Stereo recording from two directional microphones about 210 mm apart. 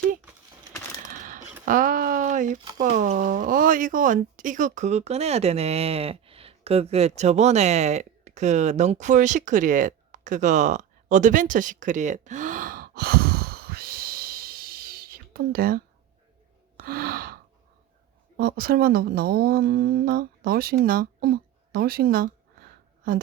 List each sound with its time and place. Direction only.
1.6 s a sound: 40° right (ahead or behind)
2.7 s speech: 40° right (ahead or behind)
16.7 s gasp: 45° right (ahead or behind)
18.3 s speech: 45° right (ahead or behind)